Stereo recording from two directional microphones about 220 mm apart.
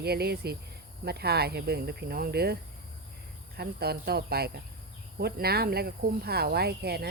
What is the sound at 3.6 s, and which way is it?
Speech, 45° right (ahead or behind).